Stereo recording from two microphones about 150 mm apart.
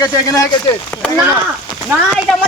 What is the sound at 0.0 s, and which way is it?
Speech, 20° left (ahead or behind).